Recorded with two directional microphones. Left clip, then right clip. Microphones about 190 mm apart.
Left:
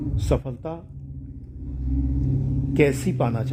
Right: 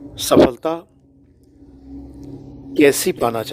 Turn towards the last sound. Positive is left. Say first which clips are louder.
# right 7 dB
turn(degrees=-35)  # may be behind; listen again after turning